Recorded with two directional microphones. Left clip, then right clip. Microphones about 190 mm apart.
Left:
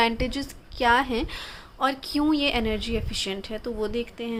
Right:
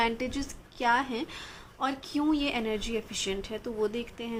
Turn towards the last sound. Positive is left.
turn(degrees=25)  # may be behind; listen again after turning